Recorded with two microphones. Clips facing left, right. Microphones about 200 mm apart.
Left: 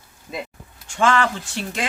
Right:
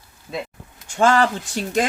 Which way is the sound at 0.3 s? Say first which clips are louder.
Right 2 dB; centre (ahead or behind).